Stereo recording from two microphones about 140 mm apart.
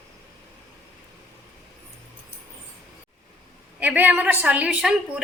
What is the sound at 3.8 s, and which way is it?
A woman's voice, 10° right (ahead or behind).